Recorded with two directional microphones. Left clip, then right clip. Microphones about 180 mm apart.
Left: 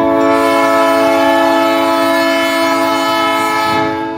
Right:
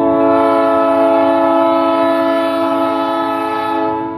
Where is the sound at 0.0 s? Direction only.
15° left (ahead or behind).